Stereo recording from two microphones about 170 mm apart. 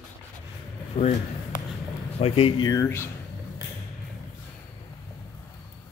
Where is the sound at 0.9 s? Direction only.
40° left (ahead or behind).